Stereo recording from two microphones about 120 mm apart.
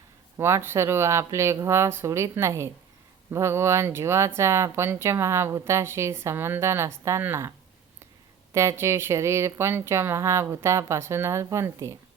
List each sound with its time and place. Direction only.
0.3 s speech: 20° right (ahead or behind)
8.5 s speech: 20° right (ahead or behind)